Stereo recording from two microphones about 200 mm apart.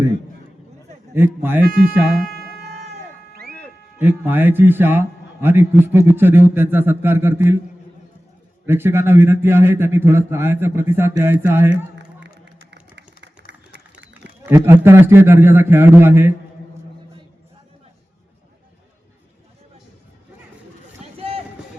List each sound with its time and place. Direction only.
1.1 s a man's voice: 10° right (ahead or behind)
4.0 s a man's voice: 10° right (ahead or behind)
8.6 s a man's voice: 10° right (ahead or behind)
12.7 s a sound: 60° right (ahead or behind)
14.1 s a man's voice: 10° right (ahead or behind)
21.0 s rowboat: 30° right (ahead or behind)